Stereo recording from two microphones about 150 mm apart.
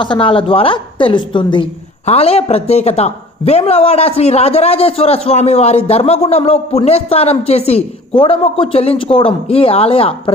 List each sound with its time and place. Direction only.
0.0 s a woman's voice: 35° left (ahead or behind)
2.0 s a man's voice: 40° left (ahead or behind)